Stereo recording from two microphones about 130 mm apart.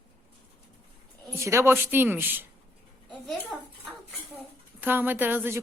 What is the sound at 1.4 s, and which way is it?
Speech, 20° right (ahead or behind).